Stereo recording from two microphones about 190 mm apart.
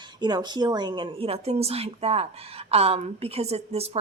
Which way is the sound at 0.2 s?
20° right (ahead or behind).